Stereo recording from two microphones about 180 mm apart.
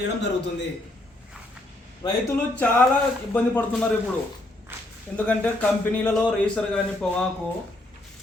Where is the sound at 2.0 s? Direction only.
20° left (ahead or behind).